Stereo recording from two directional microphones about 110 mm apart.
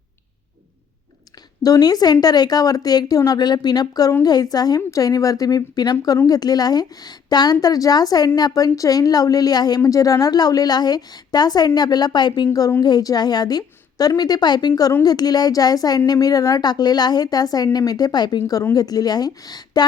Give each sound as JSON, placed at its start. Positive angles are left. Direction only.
{"t": 1.6, "sound": "speech", "side_deg": 35}